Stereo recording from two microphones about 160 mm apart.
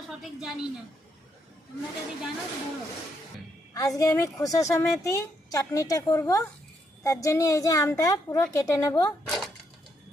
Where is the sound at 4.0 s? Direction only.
20° left (ahead or behind).